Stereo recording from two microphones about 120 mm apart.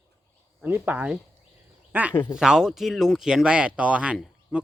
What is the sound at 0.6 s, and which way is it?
A man's voice, 15° right (ahead or behind).